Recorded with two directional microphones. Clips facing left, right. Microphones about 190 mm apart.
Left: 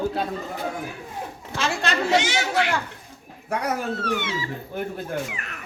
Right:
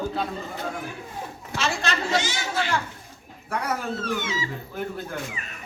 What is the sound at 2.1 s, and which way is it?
Speech, 70° left (ahead or behind).